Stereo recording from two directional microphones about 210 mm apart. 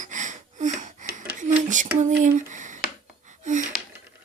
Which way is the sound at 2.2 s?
35° right (ahead or behind).